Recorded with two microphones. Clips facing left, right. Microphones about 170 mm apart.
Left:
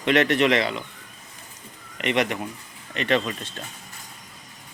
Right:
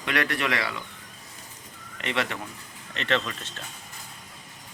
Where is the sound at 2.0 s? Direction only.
20° left (ahead or behind).